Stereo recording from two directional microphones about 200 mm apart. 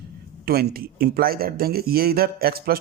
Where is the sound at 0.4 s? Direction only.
50° right (ahead or behind).